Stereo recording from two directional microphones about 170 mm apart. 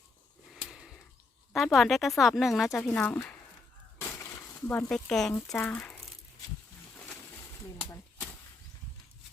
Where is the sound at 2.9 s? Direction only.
10° left (ahead or behind).